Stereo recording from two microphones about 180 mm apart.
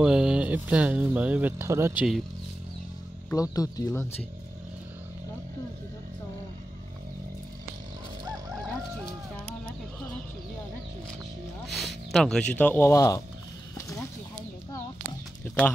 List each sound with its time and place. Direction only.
0.0 s speech: 5° right (ahead or behind)
3.3 s speech: 20° left (ahead or behind)
11.6 s music: centre (ahead or behind)
12.1 s speech: 5° left (ahead or behind)
13.7 s a sound: 15° left (ahead or behind)
15.4 s bird: 5° left (ahead or behind)